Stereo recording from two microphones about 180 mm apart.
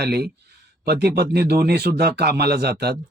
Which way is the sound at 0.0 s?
65° right (ahead or behind).